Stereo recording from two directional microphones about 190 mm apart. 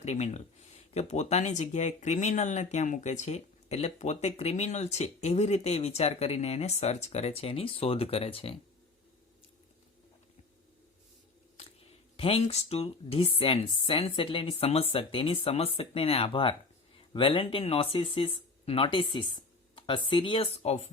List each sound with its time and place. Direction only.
0.0 s speech: 35° left (ahead or behind)
11.5 s speech: 30° left (ahead or behind)
19.7 s a sound: 25° left (ahead or behind)
20.1 s speech: 25° left (ahead or behind)